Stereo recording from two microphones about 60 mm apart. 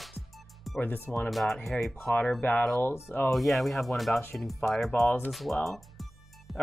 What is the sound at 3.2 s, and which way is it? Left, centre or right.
Speech, centre.